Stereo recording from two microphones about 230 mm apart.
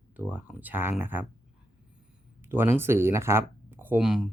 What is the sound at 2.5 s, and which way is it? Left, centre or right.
Speech, centre.